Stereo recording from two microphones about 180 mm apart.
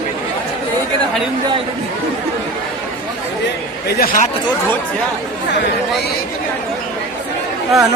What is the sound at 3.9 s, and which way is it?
Speech, 50° left (ahead or behind).